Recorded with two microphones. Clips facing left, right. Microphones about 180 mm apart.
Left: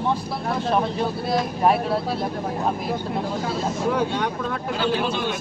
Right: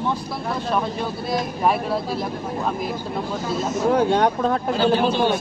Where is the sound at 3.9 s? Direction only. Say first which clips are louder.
Right 5 dB; 50° right (ahead or behind); by 5.4 s 30° right (ahead or behind).